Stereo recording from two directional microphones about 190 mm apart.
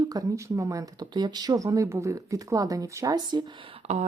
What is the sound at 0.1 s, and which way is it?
Speech, 15° right (ahead or behind).